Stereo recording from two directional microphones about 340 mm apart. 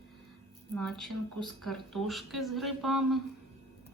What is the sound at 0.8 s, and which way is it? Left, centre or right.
A woman's voice, centre.